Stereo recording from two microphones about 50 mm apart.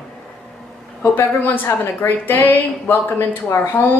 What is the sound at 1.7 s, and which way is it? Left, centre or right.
Speech, left.